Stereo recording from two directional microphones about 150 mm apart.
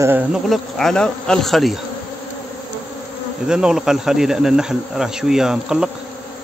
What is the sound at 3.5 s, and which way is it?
Speech, 5° right (ahead or behind).